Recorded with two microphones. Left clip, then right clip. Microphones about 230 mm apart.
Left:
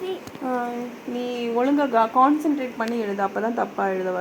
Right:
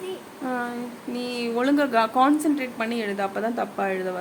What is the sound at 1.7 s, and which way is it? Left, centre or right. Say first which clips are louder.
Speech: left 1 dB; right.